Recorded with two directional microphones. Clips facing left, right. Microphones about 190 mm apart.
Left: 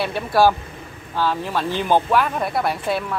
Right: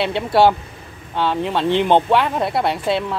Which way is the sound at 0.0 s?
25° right (ahead or behind).